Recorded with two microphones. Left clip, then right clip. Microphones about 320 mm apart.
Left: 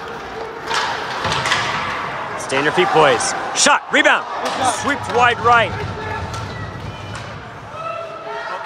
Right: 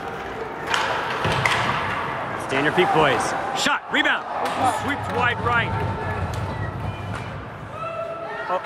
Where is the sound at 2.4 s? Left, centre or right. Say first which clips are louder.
Left 3 dB; centre.